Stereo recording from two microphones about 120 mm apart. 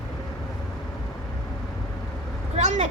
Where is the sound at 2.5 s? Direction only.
70° right (ahead or behind).